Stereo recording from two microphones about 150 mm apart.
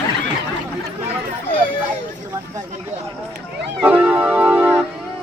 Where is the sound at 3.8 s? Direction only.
10° right (ahead or behind).